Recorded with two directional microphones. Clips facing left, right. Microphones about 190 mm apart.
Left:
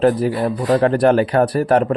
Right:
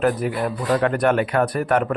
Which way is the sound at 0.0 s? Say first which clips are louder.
Left 5 dB; 35° left (ahead or behind).